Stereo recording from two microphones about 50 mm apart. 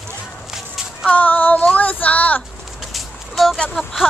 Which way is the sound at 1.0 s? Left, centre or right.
Left.